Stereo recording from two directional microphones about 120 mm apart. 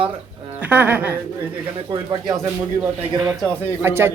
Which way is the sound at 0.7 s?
15° right (ahead or behind).